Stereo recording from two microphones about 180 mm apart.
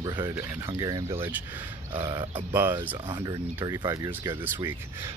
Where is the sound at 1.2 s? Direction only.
10° right (ahead or behind).